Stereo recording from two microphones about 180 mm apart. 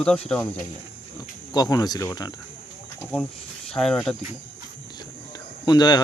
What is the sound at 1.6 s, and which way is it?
Speech, 20° left (ahead or behind).